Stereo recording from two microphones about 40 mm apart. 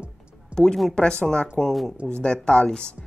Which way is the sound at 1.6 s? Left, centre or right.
Centre.